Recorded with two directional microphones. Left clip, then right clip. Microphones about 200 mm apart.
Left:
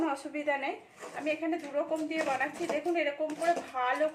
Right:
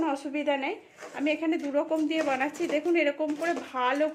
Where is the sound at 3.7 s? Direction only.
60° right (ahead or behind).